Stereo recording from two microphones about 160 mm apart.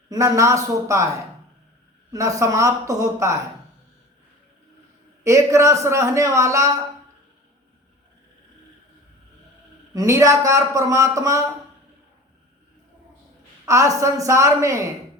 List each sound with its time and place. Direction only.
0.1 s a man's voice: 20° right (ahead or behind)
2.1 s a man's voice: 20° right (ahead or behind)
5.2 s a man's voice: 20° right (ahead or behind)
9.9 s a man's voice: 20° right (ahead or behind)
13.7 s a man's voice: 20° right (ahead or behind)